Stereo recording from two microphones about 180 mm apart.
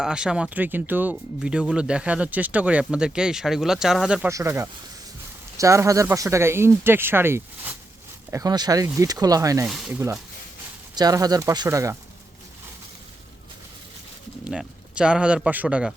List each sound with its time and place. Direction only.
0.0 s speech: 5° right (ahead or behind)
4.3 s speech: 15° right (ahead or behind)
9.6 s speech: centre (ahead or behind)
9.9 s speech: 15° right (ahead or behind)
14.4 s speech: 5° right (ahead or behind)